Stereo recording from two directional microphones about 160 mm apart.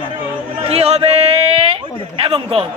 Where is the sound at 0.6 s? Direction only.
40° right (ahead or behind).